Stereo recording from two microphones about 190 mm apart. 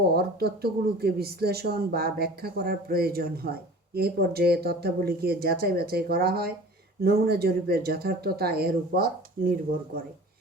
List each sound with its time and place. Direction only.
0.1 s speech: 55° right (ahead or behind)